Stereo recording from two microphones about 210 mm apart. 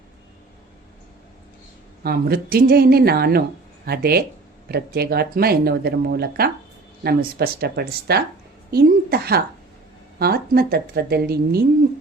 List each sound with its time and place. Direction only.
2.0 s a woman's voice: 45° right (ahead or behind)